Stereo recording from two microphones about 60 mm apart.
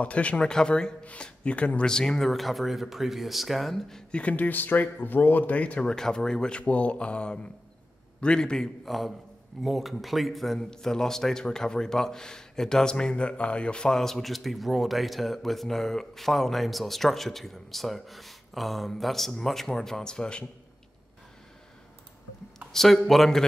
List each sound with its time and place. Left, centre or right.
0.0 s speech: left
1.9 s a man's voice: centre
4.1 s speech: left
5.9 s speech: centre
8.8 s a man's voice: centre
22.7 s a man's voice: centre